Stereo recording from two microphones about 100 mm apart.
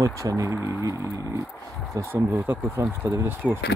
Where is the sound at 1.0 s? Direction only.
35° left (ahead or behind).